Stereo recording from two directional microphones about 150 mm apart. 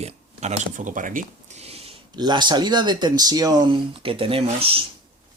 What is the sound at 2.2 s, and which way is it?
Speech, 30° right (ahead or behind).